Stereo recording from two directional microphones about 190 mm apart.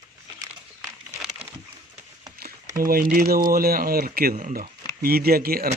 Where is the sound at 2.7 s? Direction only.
50° right (ahead or behind).